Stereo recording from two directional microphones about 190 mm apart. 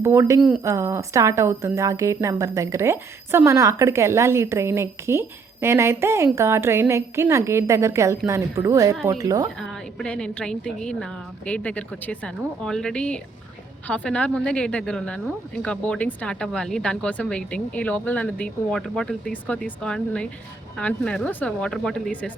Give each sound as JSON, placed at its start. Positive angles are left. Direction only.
{"t": 0.0, "sound": "a woman's voice", "side_deg": -15}
{"t": 9.6, "sound": "a woman's voice", "side_deg": 5}